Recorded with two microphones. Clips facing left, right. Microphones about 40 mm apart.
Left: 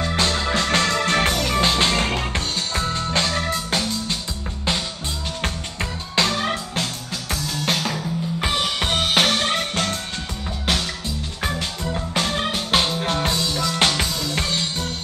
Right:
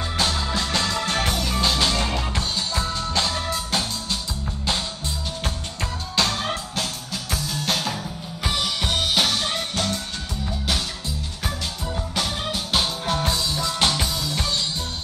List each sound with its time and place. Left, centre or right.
0.2 s music: left
1.6 s music: left
5.8 s music: left
11.4 s music: left